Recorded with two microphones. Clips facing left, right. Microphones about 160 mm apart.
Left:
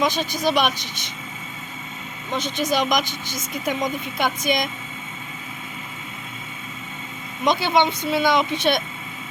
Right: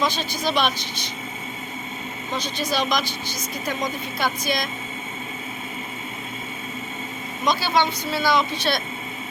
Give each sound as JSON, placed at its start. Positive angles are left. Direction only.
{"t": 0.4, "sound": "speech", "side_deg": 15}
{"t": 2.3, "sound": "speech", "side_deg": 20}
{"t": 7.4, "sound": "speech", "side_deg": 20}